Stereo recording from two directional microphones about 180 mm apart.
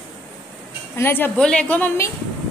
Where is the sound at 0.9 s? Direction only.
10° left (ahead or behind).